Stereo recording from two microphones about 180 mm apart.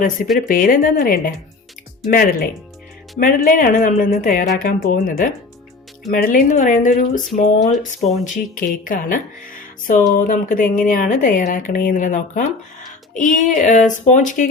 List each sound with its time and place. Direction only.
0.3 s speech: 50° left (ahead or behind)